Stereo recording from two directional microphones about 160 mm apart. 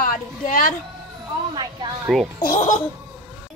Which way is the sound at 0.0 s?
60° left (ahead or behind).